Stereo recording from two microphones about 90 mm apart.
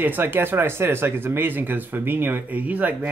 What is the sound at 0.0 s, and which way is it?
Speech, 25° right (ahead or behind).